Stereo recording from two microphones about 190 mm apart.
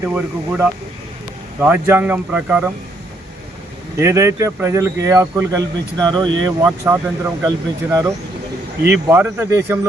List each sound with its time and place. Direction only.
0.0 s speech: 10° right (ahead or behind)
3.9 s speech: 15° right (ahead or behind)